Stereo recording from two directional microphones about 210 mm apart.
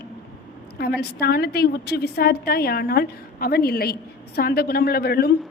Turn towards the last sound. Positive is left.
turn(degrees=50)  # may be behind; listen again after turning